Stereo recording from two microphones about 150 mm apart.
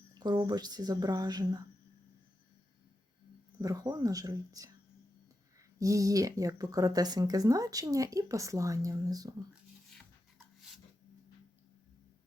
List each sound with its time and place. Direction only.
0.1 s speech: 30° right (ahead or behind)
3.6 s speech: 25° right (ahead or behind)
5.8 s speech: 20° right (ahead or behind)
9.9 s rub: 5° left (ahead or behind)